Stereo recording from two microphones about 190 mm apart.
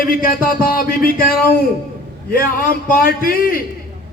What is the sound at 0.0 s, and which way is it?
A man's voice, 50° left (ahead or behind).